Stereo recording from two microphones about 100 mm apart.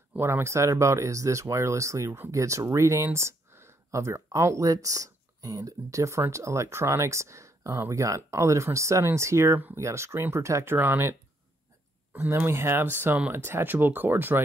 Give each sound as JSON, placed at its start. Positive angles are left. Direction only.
{"t": 0.1, "sound": "speech", "side_deg": -25}